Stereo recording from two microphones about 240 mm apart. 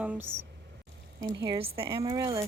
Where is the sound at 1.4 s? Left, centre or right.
Right.